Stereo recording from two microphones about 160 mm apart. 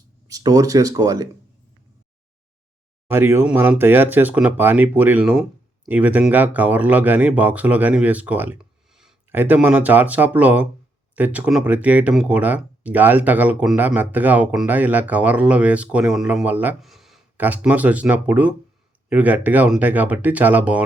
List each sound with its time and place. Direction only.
0.3 s speech: 20° right (ahead or behind)
3.1 s speech: 15° right (ahead or behind)